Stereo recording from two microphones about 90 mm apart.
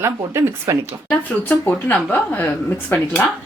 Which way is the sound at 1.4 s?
20° left (ahead or behind).